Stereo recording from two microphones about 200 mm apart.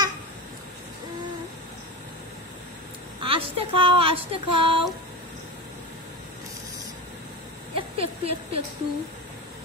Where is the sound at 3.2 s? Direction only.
25° right (ahead or behind).